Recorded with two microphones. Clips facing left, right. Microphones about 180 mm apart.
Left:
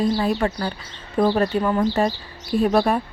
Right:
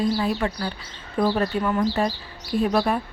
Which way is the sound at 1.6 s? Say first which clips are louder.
Left 2 dB; 30° left (ahead or behind).